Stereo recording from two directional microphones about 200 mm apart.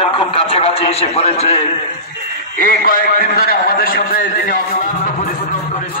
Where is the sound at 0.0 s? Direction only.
30° left (ahead or behind).